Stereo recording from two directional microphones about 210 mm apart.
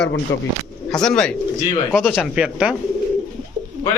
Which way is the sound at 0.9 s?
5° left (ahead or behind).